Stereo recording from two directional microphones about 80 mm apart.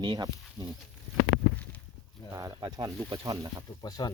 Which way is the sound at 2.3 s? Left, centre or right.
Right.